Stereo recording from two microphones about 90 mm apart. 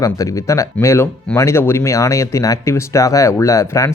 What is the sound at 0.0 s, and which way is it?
Speech, 40° left (ahead or behind).